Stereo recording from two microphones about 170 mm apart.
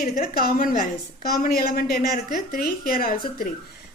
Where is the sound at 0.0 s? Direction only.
55° left (ahead or behind).